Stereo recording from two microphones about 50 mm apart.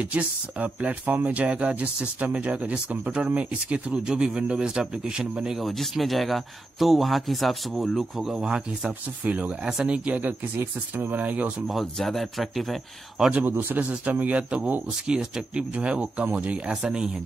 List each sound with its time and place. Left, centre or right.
0.0 s speech: right
5.6 s speech: centre; by 10.2 s right
10.2 s speech: right
11.7 s speech: centre
13.5 s a man's voice: right
13.7 s speech: right
15.0 s speech: centre